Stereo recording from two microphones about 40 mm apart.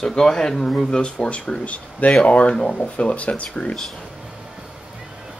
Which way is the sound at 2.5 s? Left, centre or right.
Centre.